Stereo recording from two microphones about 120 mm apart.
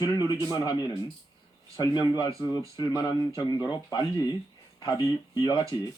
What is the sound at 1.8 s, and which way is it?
Speech, 30° left (ahead or behind).